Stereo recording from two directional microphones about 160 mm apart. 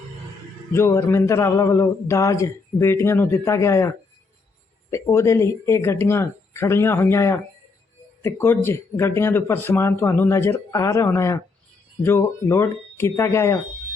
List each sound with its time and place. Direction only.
0.7 s speech: 15° left (ahead or behind)